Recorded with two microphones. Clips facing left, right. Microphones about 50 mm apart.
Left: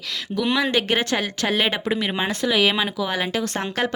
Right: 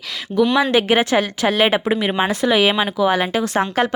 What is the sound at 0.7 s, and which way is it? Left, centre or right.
A woman's voice, centre.